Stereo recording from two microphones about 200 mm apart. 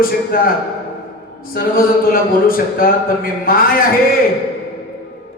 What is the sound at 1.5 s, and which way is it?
Speech, 45° left (ahead or behind).